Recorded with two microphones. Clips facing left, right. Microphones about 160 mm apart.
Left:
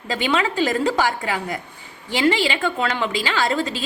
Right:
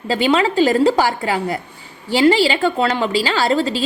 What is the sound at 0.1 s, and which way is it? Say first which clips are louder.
A woman's voice: right 6 dB; 35° right (ahead or behind).